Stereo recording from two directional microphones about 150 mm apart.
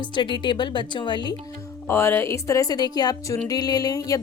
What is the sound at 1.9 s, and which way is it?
A woman's voice, 15° left (ahead or behind).